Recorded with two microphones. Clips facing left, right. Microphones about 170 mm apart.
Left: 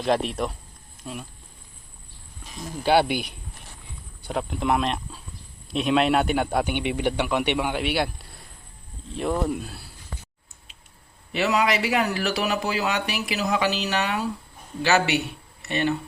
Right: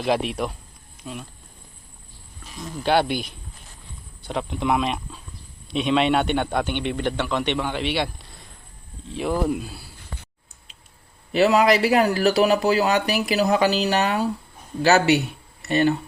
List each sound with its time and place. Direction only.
0.0 s a man's voice: centre (ahead or behind)
2.8 s a man's voice: 5° left (ahead or behind)
9.1 s a man's voice: centre (ahead or behind)
11.3 s speech: 35° right (ahead or behind)